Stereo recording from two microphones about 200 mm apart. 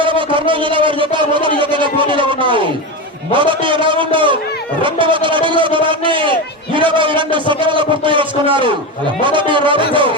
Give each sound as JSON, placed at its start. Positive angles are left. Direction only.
{"t": 0.0, "sound": "speech", "side_deg": -25}